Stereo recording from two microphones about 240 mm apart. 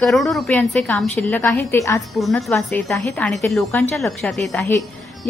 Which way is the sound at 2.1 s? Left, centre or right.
Centre.